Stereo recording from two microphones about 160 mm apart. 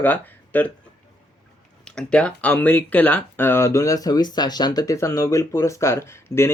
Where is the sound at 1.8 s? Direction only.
5° left (ahead or behind).